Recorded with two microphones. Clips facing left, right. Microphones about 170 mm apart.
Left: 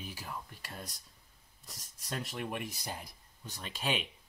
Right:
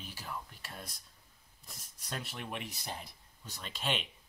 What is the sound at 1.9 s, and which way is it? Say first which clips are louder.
Speech: left 3 dB; 10° left (ahead or behind).